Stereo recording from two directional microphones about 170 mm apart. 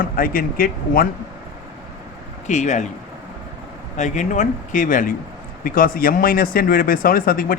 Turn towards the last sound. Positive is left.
turn(degrees=55)  # may be behind; listen again after turning